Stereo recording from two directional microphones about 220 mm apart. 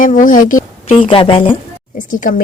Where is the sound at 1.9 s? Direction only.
35° left (ahead or behind).